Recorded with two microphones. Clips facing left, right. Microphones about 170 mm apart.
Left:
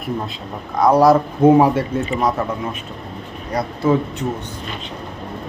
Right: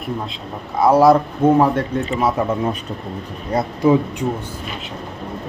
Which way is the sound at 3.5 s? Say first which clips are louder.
Right 3 dB; 25° right (ahead or behind).